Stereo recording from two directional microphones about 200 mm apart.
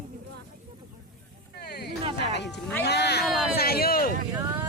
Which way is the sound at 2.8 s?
55° left (ahead or behind).